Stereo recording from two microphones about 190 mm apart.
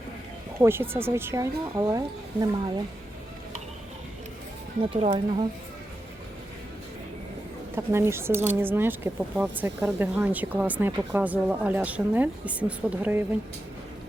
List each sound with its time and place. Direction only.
0.6 s speech: 10° right (ahead or behind)
4.8 s speech: 30° right (ahead or behind)
7.8 s speech: 15° right (ahead or behind)